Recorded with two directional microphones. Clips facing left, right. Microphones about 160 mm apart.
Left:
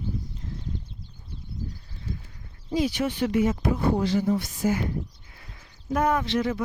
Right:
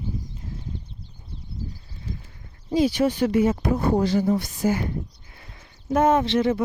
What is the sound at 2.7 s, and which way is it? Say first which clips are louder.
Speech: right 5 dB; 30° right (ahead or behind).